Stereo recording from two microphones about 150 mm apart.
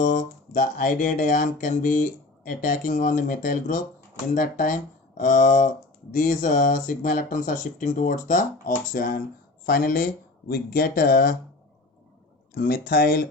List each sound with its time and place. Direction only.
0.0 s speech: 55° left (ahead or behind); by 11.3 s 80° left
12.5 s speech: 80° left